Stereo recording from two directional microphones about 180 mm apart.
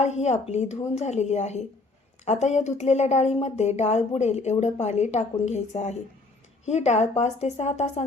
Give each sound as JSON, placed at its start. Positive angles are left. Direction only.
{"t": 0.0, "sound": "a woman's voice", "side_deg": 40}